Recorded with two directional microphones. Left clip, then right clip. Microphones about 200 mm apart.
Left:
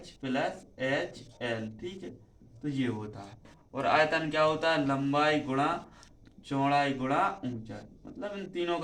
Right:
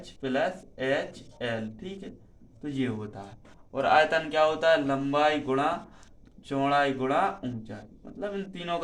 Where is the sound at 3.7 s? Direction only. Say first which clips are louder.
Right 4 dB; 55° right (ahead or behind).